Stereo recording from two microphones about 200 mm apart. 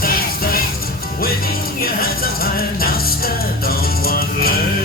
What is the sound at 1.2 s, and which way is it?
Music, 50° left (ahead or behind).